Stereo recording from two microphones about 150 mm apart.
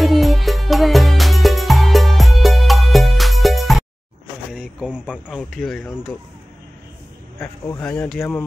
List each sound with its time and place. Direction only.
0.0 s music: centre (ahead or behind)
4.5 s a sound: 5° right (ahead or behind)
5.4 s speech: 5° left (ahead or behind)
7.4 s speech: 20° left (ahead or behind)
7.8 s speech: 5° left (ahead or behind)